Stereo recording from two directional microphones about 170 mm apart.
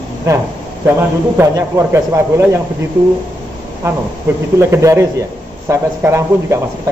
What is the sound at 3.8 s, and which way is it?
A man's voice, 15° right (ahead or behind).